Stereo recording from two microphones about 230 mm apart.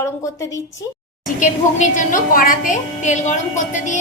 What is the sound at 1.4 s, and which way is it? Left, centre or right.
A woman's voice, left.